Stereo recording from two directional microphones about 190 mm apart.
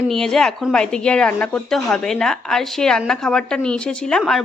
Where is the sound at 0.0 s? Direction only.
Centre (ahead or behind).